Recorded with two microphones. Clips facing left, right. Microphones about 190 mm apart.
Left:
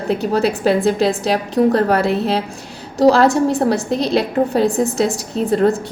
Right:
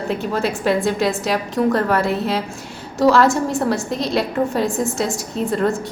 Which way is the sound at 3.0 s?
35° left (ahead or behind).